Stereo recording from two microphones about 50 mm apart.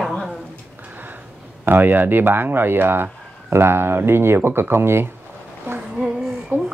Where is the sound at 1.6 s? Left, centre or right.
Right.